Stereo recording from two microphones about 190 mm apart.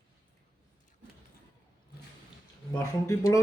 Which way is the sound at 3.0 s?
20° left (ahead or behind).